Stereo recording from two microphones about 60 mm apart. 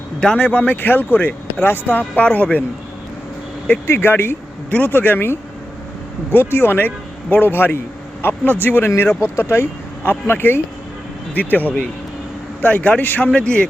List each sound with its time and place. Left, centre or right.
0.3 s speech: left
2.1 s speech: left
3.8 s speech: left
8.9 s speech: left; by 13.7 s centre